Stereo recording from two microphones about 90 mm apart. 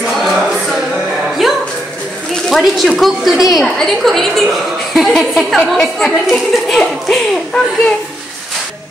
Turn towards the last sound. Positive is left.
turn(degrees=5)  # may be behind; listen again after turning